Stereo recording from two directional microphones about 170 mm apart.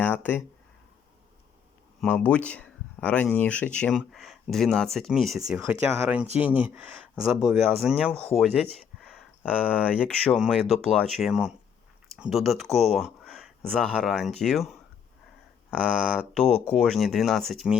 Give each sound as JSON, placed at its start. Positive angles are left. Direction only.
{"t": 0.0, "sound": "speech", "side_deg": 10}
{"t": 2.0, "sound": "speech", "side_deg": 10}
{"t": 10.3, "sound": "speech", "side_deg": -5}
{"t": 12.7, "sound": "a sound", "side_deg": 0}
{"t": 13.7, "sound": "speech", "side_deg": 5}
{"t": 15.8, "sound": "speech", "side_deg": 5}